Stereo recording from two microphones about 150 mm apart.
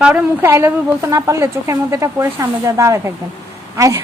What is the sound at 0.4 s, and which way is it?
A woman's voice, 15° right (ahead or behind).